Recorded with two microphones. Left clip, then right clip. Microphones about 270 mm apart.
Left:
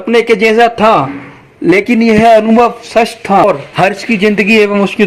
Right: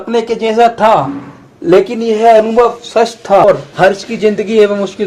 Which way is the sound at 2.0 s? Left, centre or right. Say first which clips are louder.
Left 3 dB; left.